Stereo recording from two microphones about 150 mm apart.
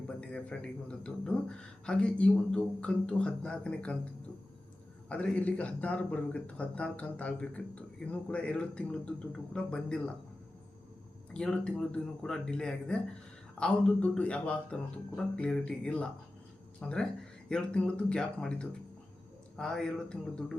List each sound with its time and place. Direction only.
0.2 s a man's voice: 5° left (ahead or behind)
11.3 s a man's voice: 5° left (ahead or behind)